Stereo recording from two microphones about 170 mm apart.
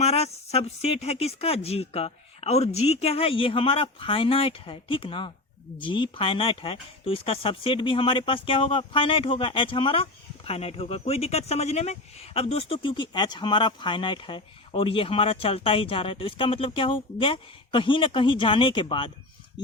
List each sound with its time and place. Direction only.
0.0 s speech: 40° left (ahead or behind)